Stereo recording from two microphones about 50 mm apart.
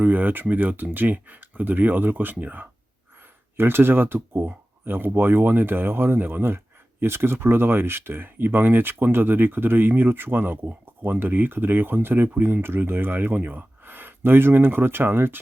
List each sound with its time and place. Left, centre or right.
0.0 s speech: right
3.6 s speech: right